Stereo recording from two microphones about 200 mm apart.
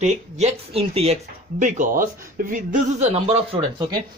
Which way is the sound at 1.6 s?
40° right (ahead or behind).